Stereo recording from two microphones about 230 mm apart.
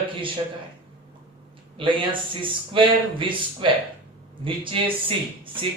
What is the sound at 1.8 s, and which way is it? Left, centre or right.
Speech, right.